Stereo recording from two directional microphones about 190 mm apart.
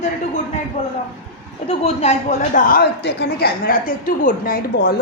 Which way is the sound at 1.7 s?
35° left (ahead or behind).